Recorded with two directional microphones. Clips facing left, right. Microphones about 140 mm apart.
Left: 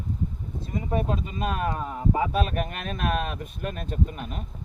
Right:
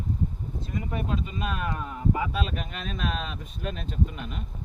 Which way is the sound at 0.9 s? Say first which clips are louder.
Left 5 dB; 40° left (ahead or behind).